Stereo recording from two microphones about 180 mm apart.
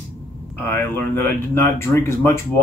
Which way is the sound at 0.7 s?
10° left (ahead or behind).